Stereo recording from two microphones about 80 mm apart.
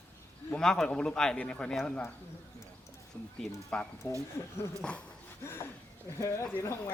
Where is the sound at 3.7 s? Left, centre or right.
Centre.